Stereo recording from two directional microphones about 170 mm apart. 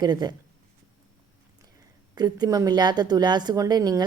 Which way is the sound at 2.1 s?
25° right (ahead or behind).